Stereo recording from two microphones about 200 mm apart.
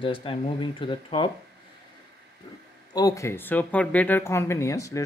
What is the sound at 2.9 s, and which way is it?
Speech, 20° left (ahead or behind).